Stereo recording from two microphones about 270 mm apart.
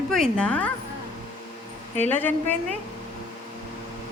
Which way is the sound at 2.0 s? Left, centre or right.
Centre.